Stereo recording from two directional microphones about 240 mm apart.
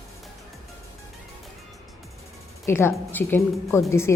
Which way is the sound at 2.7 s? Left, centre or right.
Centre.